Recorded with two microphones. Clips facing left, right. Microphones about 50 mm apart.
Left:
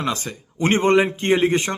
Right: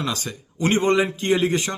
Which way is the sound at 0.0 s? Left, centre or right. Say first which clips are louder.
Left 2 dB; left.